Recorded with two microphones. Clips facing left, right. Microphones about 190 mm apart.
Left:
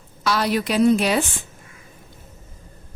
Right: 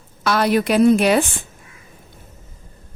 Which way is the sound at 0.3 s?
55° right (ahead or behind).